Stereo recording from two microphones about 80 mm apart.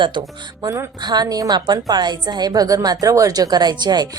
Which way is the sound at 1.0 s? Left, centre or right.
Right.